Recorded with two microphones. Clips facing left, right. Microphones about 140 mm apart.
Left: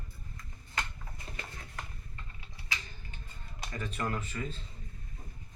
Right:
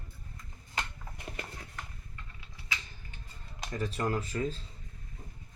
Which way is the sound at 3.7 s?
35° right (ahead or behind).